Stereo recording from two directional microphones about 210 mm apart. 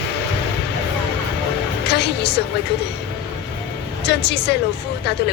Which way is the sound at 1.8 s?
55° left (ahead or behind).